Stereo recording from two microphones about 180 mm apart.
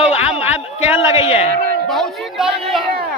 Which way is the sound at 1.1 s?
35° left (ahead or behind).